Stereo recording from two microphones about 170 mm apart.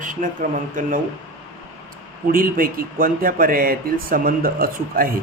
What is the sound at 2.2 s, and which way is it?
Speech, 60° right (ahead or behind).